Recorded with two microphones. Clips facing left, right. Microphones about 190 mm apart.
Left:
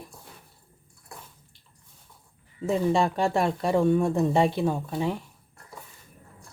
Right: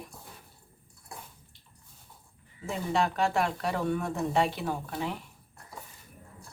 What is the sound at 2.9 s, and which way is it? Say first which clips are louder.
Speech: right 1 dB; 30° left (ahead or behind).